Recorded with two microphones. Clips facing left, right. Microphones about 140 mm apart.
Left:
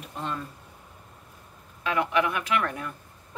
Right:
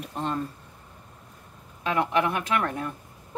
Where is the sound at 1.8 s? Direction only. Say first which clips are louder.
Right 1 dB; 30° right (ahead or behind).